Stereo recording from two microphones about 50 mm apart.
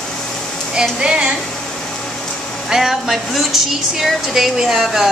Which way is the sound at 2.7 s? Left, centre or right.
Centre.